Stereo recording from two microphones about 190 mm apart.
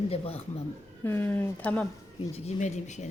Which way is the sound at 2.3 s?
35° left (ahead or behind).